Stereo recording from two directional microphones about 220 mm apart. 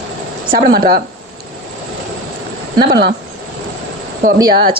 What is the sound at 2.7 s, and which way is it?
Speech, 45° right (ahead or behind).